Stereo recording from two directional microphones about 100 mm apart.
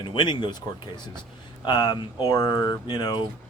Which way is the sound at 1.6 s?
50° left (ahead or behind).